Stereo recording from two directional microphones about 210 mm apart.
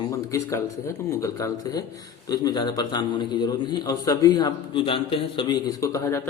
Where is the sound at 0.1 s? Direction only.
15° left (ahead or behind).